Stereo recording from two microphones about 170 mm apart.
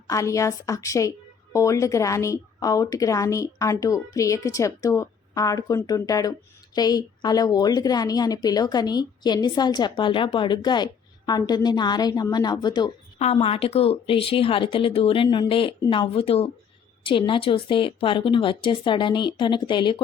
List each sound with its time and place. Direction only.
0.1 s speech: 20° left (ahead or behind)
13.1 s speech: 40° left (ahead or behind)